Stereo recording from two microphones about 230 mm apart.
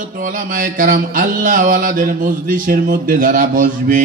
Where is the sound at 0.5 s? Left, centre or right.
Right.